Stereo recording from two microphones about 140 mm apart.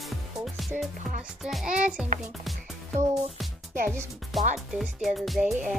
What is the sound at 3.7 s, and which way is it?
Speech, 70° right (ahead or behind).